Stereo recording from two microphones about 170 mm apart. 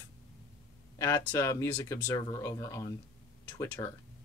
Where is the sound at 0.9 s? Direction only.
15° left (ahead or behind).